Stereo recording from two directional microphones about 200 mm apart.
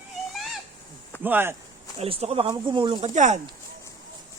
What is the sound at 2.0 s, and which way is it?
Speech, 30° right (ahead or behind).